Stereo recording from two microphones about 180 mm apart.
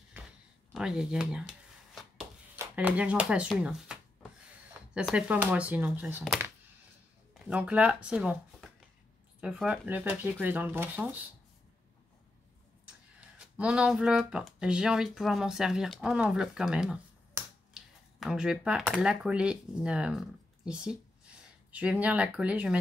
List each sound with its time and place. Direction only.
0.2 s a sound: 10° right (ahead or behind)
0.7 s speech: 5° right (ahead or behind)
2.0 s a sound: 5° right (ahead or behind)
2.6 s speech: 10° right (ahead or behind)
7.4 s speech: 5° right (ahead or behind)
13.6 s speech: 5° right (ahead or behind)